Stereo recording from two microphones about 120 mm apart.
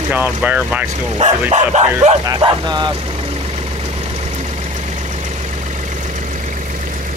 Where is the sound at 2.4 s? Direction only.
40° right (ahead or behind).